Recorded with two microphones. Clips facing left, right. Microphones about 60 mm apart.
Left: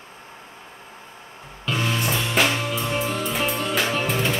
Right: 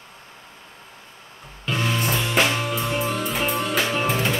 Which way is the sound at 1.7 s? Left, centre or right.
Centre.